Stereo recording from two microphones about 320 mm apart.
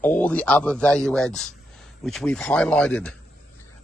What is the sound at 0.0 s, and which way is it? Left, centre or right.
Speech, centre.